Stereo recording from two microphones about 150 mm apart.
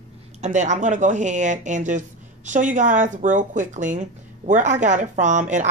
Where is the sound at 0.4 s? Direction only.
55° right (ahead or behind).